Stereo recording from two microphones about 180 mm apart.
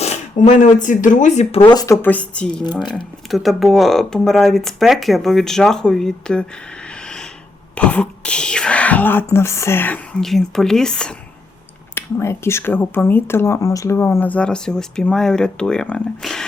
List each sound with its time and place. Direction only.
0.0 s speech: 40° left (ahead or behind)
1.6 s speech: 20° left (ahead or behind); by 6.4 s 5° left (ahead or behind)
6.9 s snort: 5° left (ahead or behind)
7.8 s speech: 5° left (ahead or behind)